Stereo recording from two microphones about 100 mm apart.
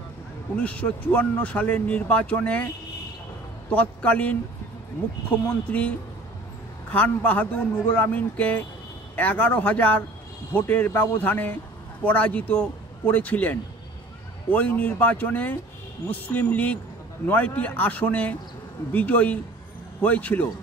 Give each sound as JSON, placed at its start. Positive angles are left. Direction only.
{"t": 0.6, "sound": "speech", "side_deg": 15}
{"t": 3.7, "sound": "speech", "side_deg": 15}
{"t": 5.7, "sound": "speech", "side_deg": 15}